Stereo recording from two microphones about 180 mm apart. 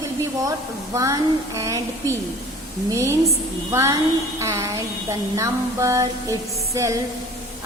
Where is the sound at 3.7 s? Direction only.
15° right (ahead or behind).